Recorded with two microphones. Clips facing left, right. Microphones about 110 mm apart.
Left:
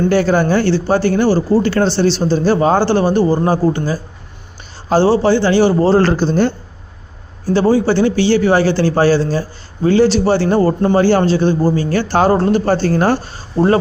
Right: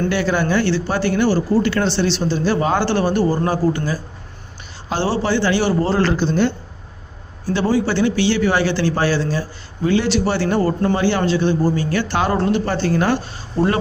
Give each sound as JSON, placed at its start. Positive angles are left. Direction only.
{"t": 0.1, "sound": "speech", "side_deg": 40}
{"t": 7.5, "sound": "speech", "side_deg": 30}